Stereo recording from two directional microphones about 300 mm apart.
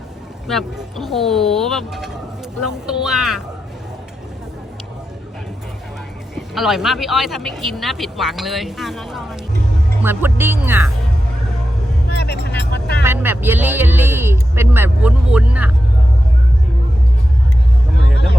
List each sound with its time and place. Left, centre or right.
0.4 s speech: centre
6.3 s speech: centre
12.1 s vehicle: left
13.1 s speech: centre